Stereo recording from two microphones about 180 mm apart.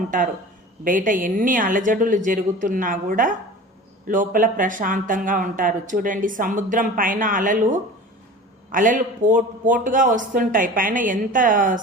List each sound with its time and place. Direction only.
0.9 s speech: 50° right (ahead or behind)